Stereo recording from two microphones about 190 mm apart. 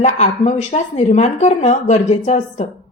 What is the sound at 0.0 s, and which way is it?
A woman's voice, 35° left (ahead or behind).